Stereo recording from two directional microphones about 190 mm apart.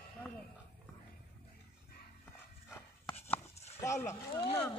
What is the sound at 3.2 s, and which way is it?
Livestock, 10° left (ahead or behind).